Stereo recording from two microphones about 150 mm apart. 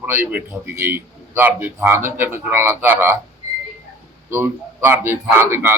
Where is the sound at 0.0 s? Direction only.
15° right (ahead or behind).